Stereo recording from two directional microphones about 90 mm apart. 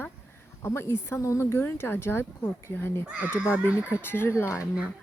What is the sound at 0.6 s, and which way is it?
Speech, 25° left (ahead or behind).